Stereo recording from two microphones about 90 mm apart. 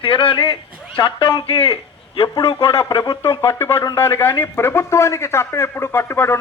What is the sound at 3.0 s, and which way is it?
A man's voice, 40° left (ahead or behind).